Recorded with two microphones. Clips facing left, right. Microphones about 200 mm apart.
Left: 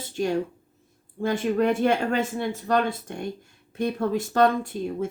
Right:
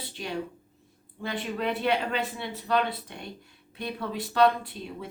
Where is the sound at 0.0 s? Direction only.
45° left (ahead or behind).